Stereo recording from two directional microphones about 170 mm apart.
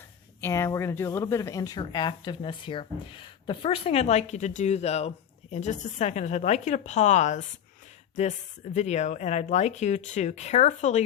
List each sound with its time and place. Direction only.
0.4 s speech: 15° left (ahead or behind); by 11.0 s 45° left (ahead or behind)